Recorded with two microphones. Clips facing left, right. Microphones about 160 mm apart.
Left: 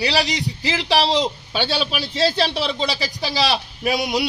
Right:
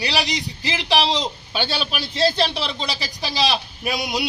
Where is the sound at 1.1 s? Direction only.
5° left (ahead or behind).